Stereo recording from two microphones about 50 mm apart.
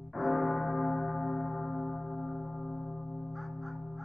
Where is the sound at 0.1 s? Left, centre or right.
Centre.